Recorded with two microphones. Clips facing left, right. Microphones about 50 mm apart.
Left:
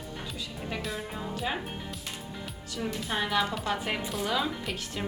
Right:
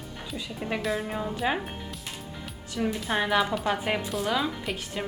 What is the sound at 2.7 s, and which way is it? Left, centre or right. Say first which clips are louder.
A woman's voice: right 5 dB; centre.